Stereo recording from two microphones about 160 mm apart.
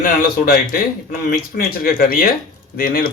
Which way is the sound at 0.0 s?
65° left (ahead or behind).